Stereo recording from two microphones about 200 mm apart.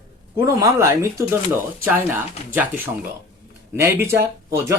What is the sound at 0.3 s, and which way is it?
Speech, 15° right (ahead or behind).